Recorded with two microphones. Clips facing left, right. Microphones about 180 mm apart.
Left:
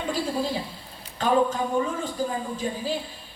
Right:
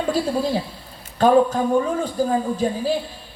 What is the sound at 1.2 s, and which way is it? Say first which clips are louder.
Speech: right 7 dB; 40° right (ahead or behind).